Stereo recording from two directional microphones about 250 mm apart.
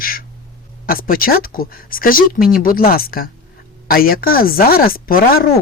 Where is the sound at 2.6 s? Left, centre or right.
Left.